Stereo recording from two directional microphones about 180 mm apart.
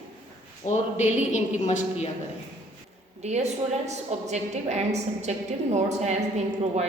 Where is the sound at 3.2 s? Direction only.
40° right (ahead or behind).